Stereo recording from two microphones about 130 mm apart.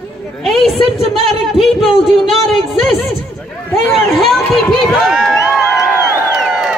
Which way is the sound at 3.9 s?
Centre (ahead or behind).